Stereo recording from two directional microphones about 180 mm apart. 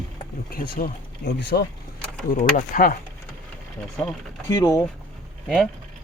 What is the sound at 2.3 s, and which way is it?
Speech, 45° left (ahead or behind).